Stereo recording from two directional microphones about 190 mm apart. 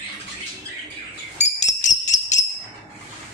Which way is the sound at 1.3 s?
35° left (ahead or behind).